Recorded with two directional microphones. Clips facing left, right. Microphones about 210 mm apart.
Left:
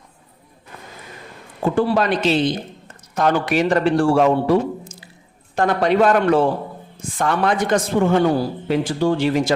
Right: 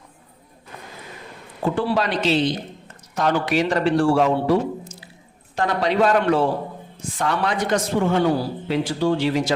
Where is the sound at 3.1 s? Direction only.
50° left (ahead or behind).